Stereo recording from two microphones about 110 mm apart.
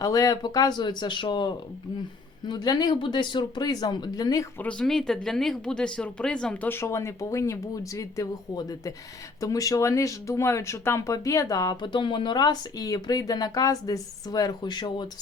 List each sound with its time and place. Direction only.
0.0 s speech: 35° left (ahead or behind)
4.6 s speech: 5° left (ahead or behind); by 15.0 s 40° left (ahead or behind)